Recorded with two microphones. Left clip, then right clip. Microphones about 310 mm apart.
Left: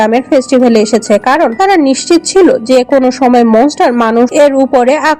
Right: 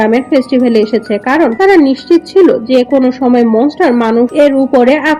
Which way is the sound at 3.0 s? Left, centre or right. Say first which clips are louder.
Left 2 dB; left.